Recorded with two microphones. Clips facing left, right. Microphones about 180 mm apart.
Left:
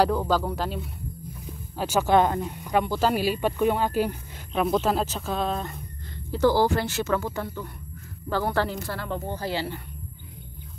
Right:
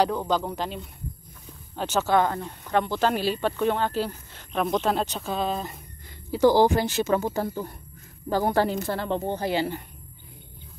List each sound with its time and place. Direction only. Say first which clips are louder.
0.0 s speech: left 1 dB; 5° left (ahead or behind)
6.3 s speech: right 3 dB; 15° right (ahead or behind)
7.3 s speech: right 4 dB; 35° right (ahead or behind)
8.3 s speech: right 3 dB; 15° right (ahead or behind)